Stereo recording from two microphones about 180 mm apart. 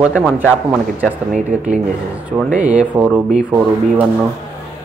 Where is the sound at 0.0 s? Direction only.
5° right (ahead or behind).